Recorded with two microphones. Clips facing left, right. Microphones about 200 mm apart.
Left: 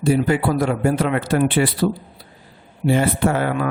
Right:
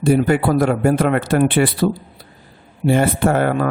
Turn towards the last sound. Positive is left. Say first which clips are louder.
# right 3 dB
turn(degrees=-50)  # may be behind; listen again after turning